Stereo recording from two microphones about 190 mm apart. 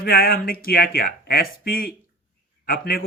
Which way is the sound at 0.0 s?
50° left (ahead or behind).